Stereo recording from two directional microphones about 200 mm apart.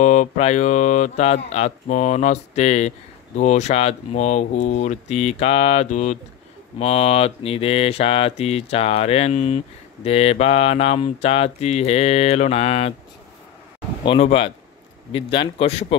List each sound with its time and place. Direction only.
0.0 s mantra: 40° left (ahead or behind)
14.0 s speech: 30° left (ahead or behind)